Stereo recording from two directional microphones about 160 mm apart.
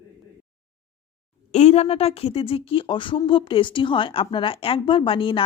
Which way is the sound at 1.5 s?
40° left (ahead or behind).